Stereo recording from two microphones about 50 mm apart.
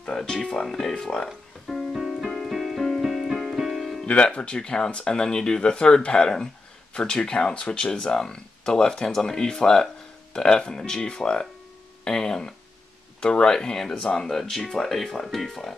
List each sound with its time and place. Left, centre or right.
0.2 s speech: centre
1.7 s music: centre
4.0 s speech: centre